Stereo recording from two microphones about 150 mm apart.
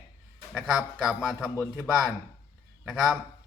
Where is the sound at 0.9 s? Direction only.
5° right (ahead or behind).